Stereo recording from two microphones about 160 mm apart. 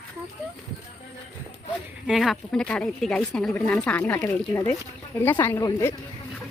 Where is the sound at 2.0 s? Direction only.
Centre (ahead or behind); by 5.9 s 15° left (ahead or behind).